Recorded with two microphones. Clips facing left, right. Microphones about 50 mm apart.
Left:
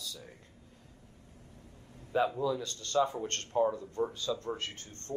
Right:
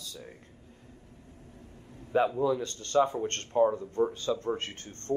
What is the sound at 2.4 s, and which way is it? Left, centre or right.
Speech, right.